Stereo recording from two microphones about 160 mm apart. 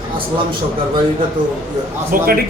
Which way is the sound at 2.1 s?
60° right (ahead or behind).